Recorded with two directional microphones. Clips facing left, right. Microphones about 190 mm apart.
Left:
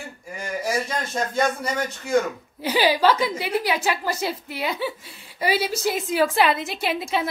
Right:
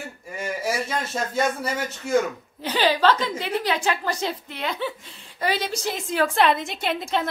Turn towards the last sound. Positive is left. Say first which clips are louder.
# left 1 dB
turn(degrees=5)  # may be behind; listen again after turning